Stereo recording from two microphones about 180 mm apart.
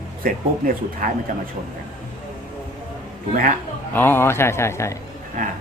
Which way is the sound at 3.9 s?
10° left (ahead or behind).